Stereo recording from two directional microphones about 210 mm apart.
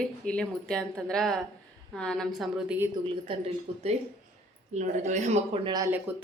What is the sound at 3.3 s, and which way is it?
A man's voice, 30° right (ahead or behind).